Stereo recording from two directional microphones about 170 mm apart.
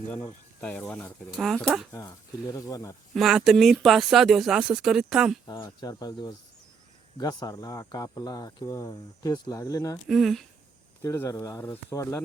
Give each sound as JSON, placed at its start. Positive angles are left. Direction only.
{"t": 0.1, "sound": "speech", "side_deg": 10}
{"t": 1.4, "sound": "speech", "side_deg": 0}
{"t": 1.9, "sound": "speech", "side_deg": 15}
{"t": 3.2, "sound": "speech", "side_deg": 0}
{"t": 5.5, "sound": "speech", "side_deg": 25}
{"t": 10.1, "sound": "speech", "side_deg": 0}
{"t": 11.0, "sound": "speech", "side_deg": 20}